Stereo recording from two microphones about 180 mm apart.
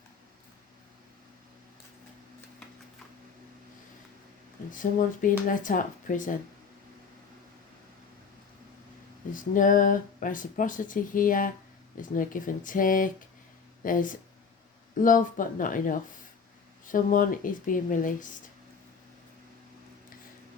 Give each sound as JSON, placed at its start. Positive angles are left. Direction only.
{"t": 4.7, "sound": "speech", "side_deg": 45}
{"t": 9.3, "sound": "speech", "side_deg": 45}